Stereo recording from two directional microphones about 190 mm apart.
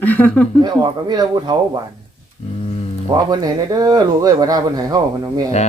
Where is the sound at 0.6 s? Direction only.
20° right (ahead or behind).